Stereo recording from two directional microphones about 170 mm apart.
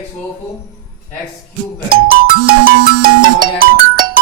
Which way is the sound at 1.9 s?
65° right (ahead or behind).